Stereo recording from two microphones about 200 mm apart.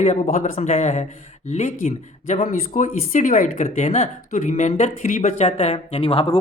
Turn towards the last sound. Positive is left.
turn(degrees=30)  # may be behind; listen again after turning